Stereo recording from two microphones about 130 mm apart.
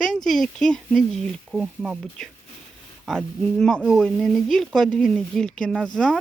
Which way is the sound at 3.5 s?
5° left (ahead or behind).